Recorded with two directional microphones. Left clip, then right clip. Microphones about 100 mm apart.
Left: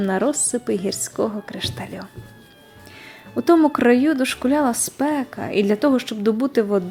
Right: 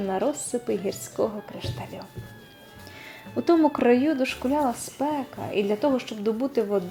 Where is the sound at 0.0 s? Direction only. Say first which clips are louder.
Left 5 dB; 35° left (ahead or behind).